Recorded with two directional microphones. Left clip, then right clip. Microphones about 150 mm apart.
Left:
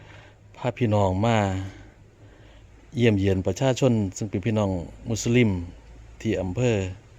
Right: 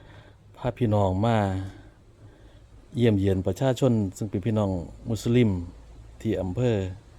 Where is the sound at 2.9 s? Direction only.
5° right (ahead or behind).